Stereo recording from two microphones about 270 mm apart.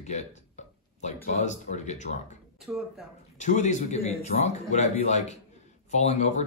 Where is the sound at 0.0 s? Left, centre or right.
Left.